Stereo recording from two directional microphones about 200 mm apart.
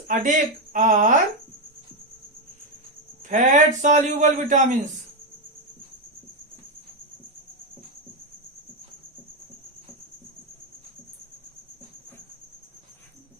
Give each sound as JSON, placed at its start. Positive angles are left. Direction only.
{"t": 0.1, "sound": "a man's voice", "side_deg": -40}
{"t": 3.2, "sound": "a man's voice", "side_deg": -40}